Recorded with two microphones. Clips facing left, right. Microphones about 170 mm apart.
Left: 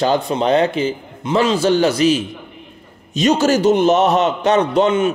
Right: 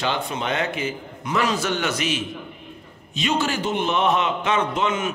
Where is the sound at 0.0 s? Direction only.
35° left (ahead or behind).